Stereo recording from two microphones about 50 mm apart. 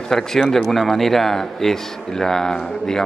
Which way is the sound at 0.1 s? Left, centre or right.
Centre.